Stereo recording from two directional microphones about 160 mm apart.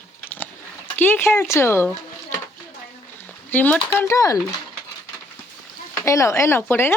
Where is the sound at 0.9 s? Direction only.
15° left (ahead or behind).